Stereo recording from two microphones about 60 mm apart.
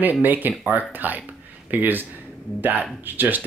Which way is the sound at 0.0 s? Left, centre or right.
Right.